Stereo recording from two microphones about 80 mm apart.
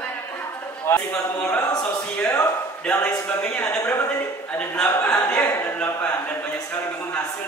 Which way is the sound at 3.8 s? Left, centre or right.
Left.